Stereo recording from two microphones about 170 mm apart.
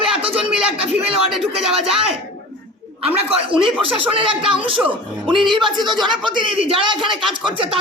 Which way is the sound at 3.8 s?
30° right (ahead or behind).